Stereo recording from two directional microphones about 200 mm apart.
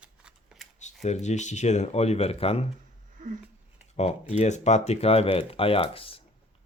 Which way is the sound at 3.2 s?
40° right (ahead or behind).